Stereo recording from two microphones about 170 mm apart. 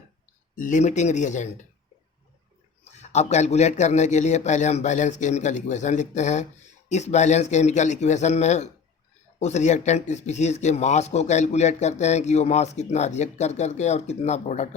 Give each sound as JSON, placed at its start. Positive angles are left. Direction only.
{"t": 0.5, "sound": "a man's voice", "side_deg": 50}
{"t": 2.9, "sound": "a man's voice", "side_deg": 40}